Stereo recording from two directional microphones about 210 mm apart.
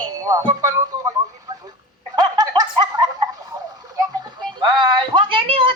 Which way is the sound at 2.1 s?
20° right (ahead or behind).